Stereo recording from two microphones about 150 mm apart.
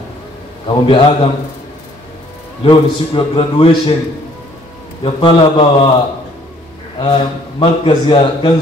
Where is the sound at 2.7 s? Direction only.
35° left (ahead or behind).